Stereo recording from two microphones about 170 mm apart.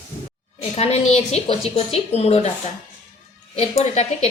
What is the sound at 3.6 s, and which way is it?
Speech, 40° left (ahead or behind).